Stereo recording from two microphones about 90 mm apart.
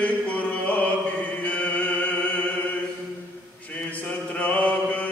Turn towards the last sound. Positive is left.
turn(degrees=15)  # may be behind; listen again after turning